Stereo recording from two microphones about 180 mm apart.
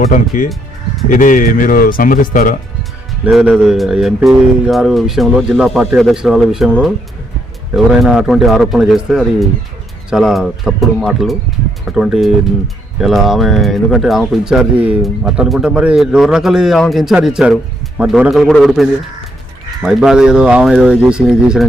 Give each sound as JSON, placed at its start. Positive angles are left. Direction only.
{"t": 1.0, "sound": "speech", "side_deg": 45}
{"t": 3.2, "sound": "speech", "side_deg": -5}
{"t": 8.0, "sound": "speech", "side_deg": -5}